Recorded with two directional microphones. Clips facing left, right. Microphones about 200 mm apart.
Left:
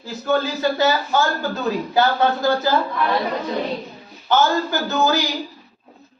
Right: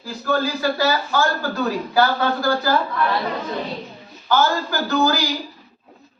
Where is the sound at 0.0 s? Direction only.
20° left (ahead or behind).